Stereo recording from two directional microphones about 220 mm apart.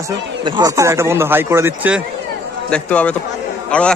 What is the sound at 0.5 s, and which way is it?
A man's voice, 15° right (ahead or behind).